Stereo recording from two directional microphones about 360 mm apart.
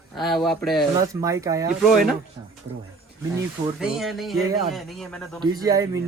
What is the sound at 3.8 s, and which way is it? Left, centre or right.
Speech, centre.